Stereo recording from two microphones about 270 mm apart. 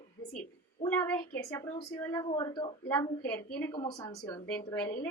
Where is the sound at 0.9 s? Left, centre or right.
Centre.